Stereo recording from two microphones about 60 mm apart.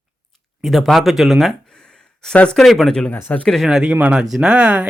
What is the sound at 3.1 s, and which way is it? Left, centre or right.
Speech, left.